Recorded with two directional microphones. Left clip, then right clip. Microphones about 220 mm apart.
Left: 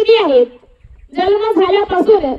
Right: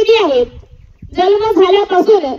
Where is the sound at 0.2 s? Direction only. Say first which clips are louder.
Left 1 dB; 40° right (ahead or behind).